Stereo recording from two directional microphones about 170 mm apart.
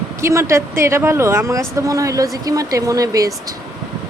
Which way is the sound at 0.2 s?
15° right (ahead or behind).